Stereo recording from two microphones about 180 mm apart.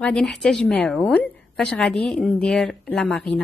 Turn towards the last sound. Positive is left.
turn(degrees=5)  # may be behind; listen again after turning